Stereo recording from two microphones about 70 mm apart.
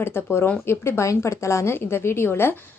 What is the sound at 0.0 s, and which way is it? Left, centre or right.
A woman's voice, left.